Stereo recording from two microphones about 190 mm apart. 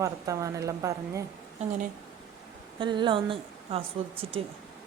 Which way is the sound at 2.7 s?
25° right (ahead or behind).